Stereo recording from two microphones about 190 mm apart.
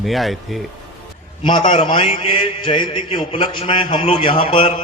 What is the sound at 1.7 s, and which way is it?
A man's voice, 25° left (ahead or behind).